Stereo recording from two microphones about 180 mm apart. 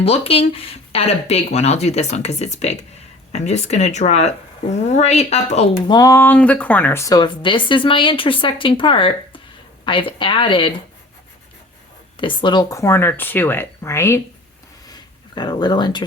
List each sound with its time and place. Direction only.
0.0 s speech: 35° left (ahead or behind)
5.9 s speech: 20° left (ahead or behind)
12.1 s speech: 25° left (ahead or behind)
14.8 s a sound: 25° left (ahead or behind)